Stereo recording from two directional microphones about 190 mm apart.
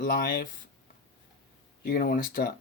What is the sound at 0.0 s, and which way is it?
Speech, 55° left (ahead or behind).